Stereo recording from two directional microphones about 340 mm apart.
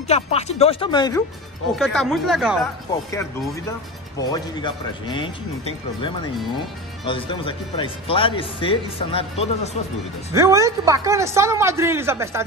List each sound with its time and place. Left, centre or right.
0.1 s speech: centre
1.8 s speech: centre
4.2 s speech: centre
10.3 s a woman's voice: centre